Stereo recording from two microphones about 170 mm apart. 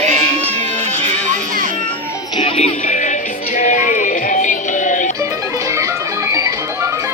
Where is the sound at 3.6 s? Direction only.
50° left (ahead or behind).